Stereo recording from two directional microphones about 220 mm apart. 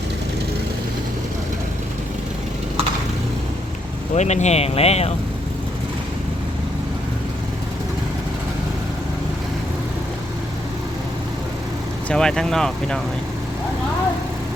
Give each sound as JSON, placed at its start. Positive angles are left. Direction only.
{"t": 4.1, "sound": "speech", "side_deg": 30}
{"t": 12.0, "sound": "speech", "side_deg": 5}